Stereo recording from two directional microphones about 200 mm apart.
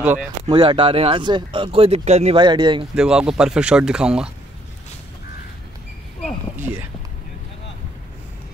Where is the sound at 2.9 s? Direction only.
5° right (ahead or behind).